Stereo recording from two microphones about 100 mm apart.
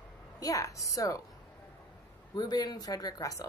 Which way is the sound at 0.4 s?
35° left (ahead or behind).